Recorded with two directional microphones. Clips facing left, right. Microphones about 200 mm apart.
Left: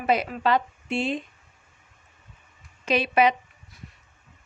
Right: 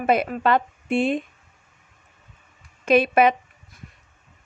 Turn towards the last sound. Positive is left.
turn(degrees=-50)  # may be behind; listen again after turning